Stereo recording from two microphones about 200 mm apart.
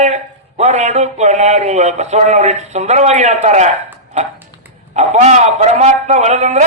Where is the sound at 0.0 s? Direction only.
35° right (ahead or behind).